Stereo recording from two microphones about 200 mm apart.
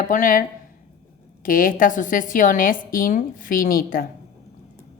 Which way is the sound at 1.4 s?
45° left (ahead or behind).